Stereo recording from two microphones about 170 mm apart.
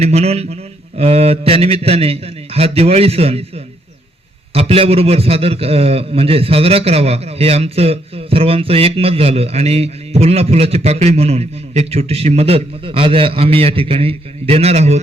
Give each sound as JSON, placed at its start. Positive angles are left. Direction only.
{"t": 0.0, "sound": "a man's voice", "side_deg": -40}
{"t": 4.5, "sound": "a man's voice", "side_deg": -35}